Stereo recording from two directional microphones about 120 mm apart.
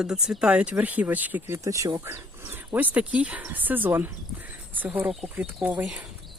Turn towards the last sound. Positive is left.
turn(degrees=-5)  # may be behind; listen again after turning